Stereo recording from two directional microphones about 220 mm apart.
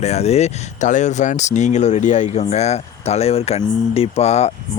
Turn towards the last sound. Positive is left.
turn(degrees=30)  # may be behind; listen again after turning